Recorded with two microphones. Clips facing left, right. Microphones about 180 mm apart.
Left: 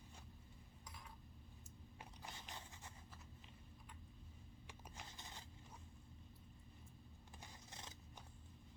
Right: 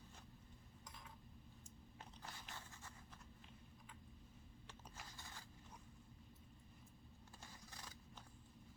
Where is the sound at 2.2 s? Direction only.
20° left (ahead or behind).